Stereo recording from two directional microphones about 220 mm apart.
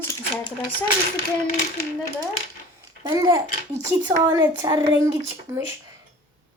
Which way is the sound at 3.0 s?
15° right (ahead or behind).